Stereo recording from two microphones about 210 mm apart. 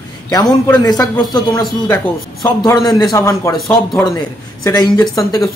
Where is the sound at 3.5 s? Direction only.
Centre (ahead or behind).